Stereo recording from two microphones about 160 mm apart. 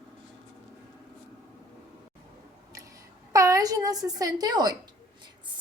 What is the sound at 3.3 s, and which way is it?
A child's voice, 20° right (ahead or behind).